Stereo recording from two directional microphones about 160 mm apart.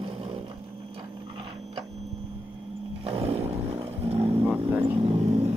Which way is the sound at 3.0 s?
40° right (ahead or behind).